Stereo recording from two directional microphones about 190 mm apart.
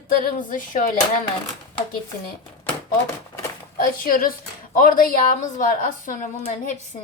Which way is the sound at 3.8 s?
45° left (ahead or behind).